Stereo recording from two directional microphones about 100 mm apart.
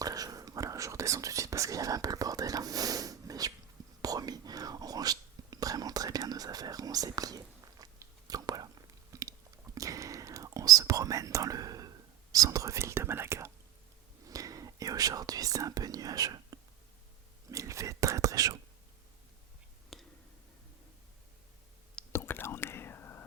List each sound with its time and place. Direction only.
0.0 s whispering: 40° right (ahead or behind)
9.1 s chewing: 35° right (ahead or behind)
9.7 s whispering: 35° right (ahead or behind)
19.9 s a sound: centre (ahead or behind)
22.1 s whispering: 20° left (ahead or behind)